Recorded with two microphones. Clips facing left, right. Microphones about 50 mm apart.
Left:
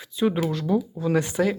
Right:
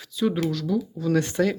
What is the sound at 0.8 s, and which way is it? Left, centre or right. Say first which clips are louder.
Speech: right 1 dB; left.